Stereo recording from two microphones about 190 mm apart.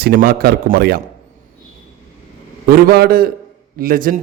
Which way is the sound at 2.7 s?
55° right (ahead or behind).